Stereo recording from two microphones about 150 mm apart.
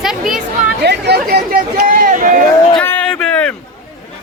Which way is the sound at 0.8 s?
90° right.